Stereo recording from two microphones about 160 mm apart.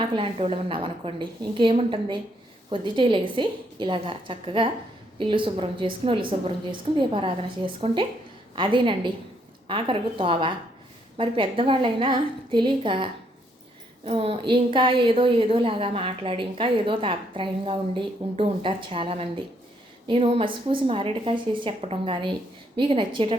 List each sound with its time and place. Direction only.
0.2 s a woman's voice: 35° right (ahead or behind)